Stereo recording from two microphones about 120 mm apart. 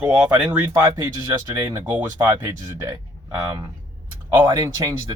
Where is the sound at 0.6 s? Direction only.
25° right (ahead or behind).